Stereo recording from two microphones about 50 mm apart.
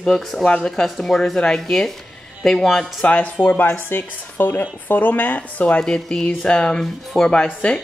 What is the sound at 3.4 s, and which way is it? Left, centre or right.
Speech, left.